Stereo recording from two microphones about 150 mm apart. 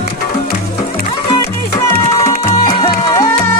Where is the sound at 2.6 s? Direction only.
30° left (ahead or behind).